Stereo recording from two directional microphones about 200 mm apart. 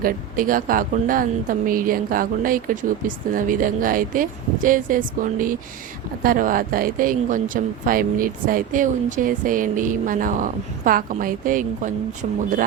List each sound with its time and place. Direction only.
0.0 s speech: 45° right (ahead or behind)